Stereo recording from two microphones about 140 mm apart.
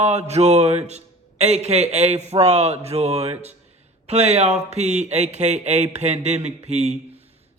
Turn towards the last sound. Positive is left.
turn(degrees=-50)  # may be behind; listen again after turning